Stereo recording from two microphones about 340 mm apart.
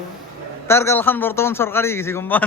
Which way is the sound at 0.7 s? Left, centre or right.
Centre.